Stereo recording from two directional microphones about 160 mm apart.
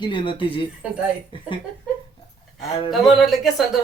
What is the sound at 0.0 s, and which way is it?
Speech, 30° left (ahead or behind).